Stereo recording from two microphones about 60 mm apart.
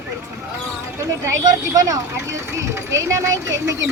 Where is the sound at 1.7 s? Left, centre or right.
Right.